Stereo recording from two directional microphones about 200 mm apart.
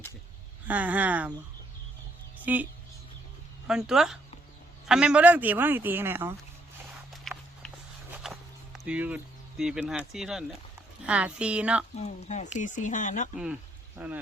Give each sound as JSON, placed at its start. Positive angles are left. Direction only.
{"t": 0.7, "sound": "a man's voice", "side_deg": -10}
{"t": 2.4, "sound": "speech", "side_deg": -10}
{"t": 3.7, "sound": "a man's voice", "side_deg": 0}
{"t": 7.1, "sound": "a sound", "side_deg": 0}
{"t": 8.1, "sound": "walk", "side_deg": 0}
{"t": 8.8, "sound": "speech", "side_deg": -5}
{"t": 11.9, "sound": "speech", "side_deg": 35}
{"t": 13.3, "sound": "speech", "side_deg": -5}